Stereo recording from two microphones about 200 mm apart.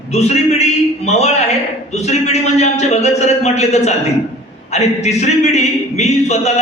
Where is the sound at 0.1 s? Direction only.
35° left (ahead or behind).